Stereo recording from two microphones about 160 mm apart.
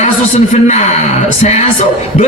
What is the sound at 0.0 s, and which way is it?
A man's voice, 45° left (ahead or behind).